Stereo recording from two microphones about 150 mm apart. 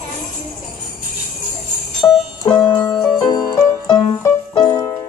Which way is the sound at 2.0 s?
20° left (ahead or behind).